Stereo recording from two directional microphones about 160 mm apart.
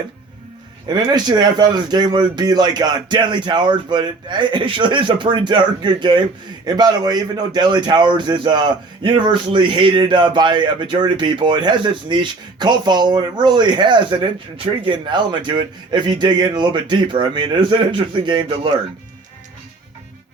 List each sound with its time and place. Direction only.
0.9 s speech: 25° right (ahead or behind)